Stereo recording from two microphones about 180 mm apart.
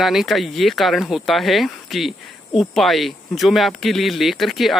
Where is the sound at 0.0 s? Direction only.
Centre (ahead or behind).